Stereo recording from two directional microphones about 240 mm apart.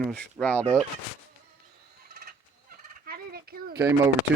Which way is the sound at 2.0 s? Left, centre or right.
Right.